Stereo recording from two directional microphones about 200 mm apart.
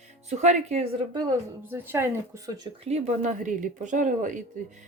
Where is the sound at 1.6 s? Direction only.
10° right (ahead or behind).